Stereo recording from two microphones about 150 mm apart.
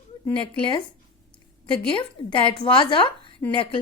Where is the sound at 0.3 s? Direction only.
35° left (ahead or behind).